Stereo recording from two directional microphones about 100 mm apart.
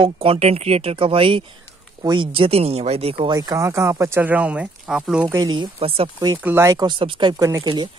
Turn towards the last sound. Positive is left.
turn(degrees=-35)  # may be behind; listen again after turning